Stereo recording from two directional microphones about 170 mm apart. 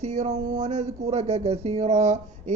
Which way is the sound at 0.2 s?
45° right (ahead or behind).